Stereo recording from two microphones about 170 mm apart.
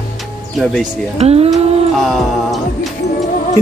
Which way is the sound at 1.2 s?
35° right (ahead or behind).